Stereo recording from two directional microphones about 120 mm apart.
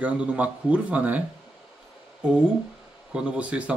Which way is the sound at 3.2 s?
10° right (ahead or behind).